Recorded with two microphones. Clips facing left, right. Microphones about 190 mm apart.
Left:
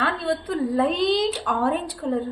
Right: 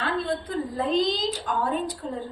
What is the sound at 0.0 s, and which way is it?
A woman's voice, 65° left (ahead or behind).